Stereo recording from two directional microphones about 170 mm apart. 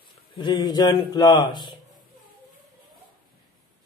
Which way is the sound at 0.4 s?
25° left (ahead or behind).